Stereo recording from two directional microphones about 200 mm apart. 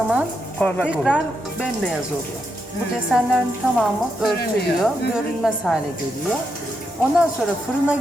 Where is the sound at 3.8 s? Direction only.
Centre (ahead or behind).